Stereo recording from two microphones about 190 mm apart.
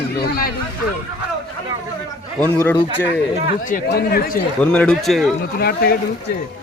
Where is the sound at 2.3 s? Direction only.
10° left (ahead or behind).